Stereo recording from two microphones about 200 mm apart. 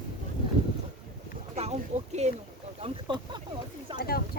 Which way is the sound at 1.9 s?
35° right (ahead or behind).